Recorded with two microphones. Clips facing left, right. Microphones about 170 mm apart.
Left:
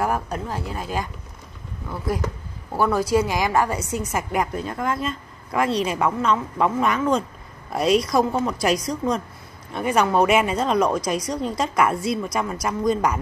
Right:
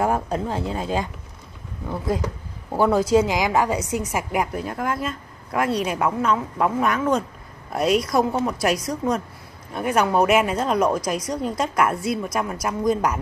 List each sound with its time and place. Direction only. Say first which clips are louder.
0.0 s a woman's voice: right 2 dB; 25° right (ahead or behind); by 13.2 s 5° right (ahead or behind)